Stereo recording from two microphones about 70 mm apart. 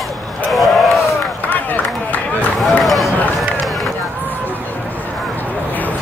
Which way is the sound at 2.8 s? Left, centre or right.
Centre.